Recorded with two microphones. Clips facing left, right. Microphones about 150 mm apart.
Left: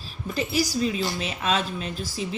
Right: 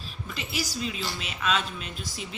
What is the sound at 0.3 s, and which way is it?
Speech, 40° left (ahead or behind).